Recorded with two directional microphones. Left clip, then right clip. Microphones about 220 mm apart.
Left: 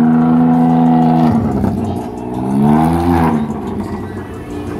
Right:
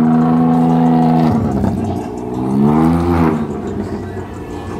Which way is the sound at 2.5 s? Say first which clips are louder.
Left 1 dB; 35° left (ahead or behind).